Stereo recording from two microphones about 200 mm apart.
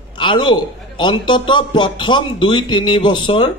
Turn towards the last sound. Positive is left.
turn(degrees=25)  # may be behind; listen again after turning